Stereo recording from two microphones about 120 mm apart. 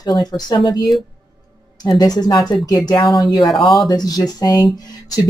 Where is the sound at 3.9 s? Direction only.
35° left (ahead or behind).